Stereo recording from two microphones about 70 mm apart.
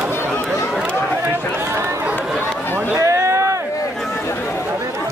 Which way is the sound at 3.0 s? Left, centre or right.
Right.